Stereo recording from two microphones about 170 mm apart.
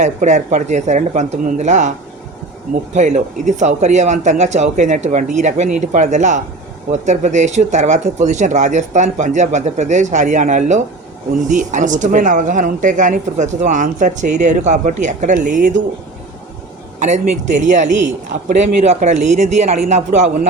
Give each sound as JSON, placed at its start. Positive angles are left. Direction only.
{"t": 0.0, "sound": "speech", "side_deg": -45}
{"t": 2.9, "sound": "speech", "side_deg": -45}
{"t": 17.0, "sound": "speech", "side_deg": -45}